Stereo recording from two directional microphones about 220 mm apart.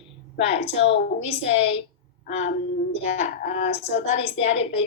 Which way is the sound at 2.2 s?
30° left (ahead or behind).